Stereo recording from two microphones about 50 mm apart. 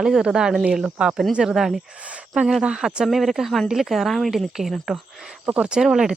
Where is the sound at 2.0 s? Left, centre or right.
Right.